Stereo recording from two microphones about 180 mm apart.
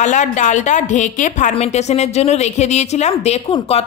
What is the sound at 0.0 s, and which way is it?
A woman's voice, 40° left (ahead or behind).